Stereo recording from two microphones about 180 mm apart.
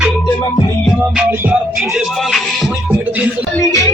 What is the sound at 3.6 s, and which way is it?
Music, 15° left (ahead or behind).